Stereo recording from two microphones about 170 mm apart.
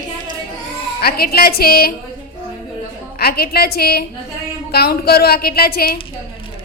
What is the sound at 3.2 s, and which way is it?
A woman's voice, 65° left (ahead or behind).